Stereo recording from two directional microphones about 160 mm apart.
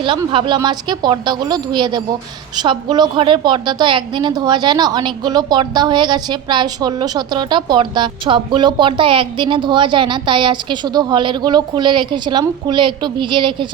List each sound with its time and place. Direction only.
0.0 s a woman's voice: 30° right (ahead or behind)